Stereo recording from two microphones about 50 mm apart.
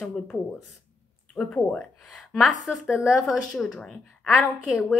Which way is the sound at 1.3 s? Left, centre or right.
Left.